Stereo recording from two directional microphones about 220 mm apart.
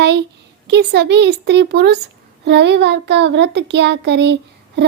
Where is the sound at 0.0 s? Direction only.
50° right (ahead or behind).